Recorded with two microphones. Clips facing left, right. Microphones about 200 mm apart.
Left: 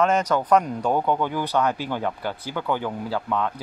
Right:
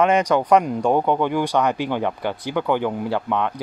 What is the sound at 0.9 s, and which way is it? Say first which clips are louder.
Speech: right 4 dB; 20° right (ahead or behind).